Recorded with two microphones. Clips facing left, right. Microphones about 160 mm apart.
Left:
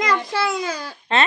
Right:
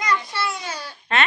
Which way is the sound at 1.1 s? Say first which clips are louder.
Left 2 dB; 25° left (ahead or behind).